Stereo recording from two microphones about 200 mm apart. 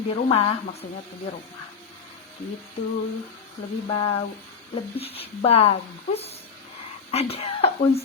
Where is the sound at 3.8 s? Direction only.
25° left (ahead or behind).